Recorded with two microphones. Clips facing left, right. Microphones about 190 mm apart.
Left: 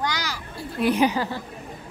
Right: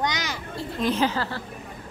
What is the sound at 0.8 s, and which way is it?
Speech, 15° left (ahead or behind).